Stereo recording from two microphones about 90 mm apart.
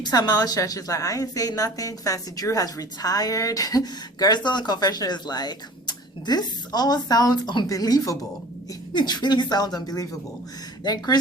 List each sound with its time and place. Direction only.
0.0 s a woman's voice: 45° left (ahead or behind)
8.9 s a woman's voice: 55° left (ahead or behind)